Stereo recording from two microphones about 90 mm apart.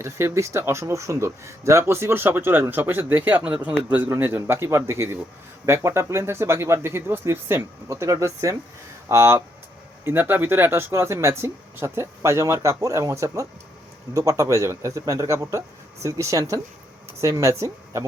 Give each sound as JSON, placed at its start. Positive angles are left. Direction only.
{"t": 0.0, "sound": "speech", "side_deg": -30}